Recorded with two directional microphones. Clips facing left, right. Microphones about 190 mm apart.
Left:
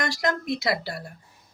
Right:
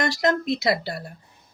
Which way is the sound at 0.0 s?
25° right (ahead or behind).